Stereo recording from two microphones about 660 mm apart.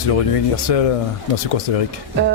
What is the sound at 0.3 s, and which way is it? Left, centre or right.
Speech, left.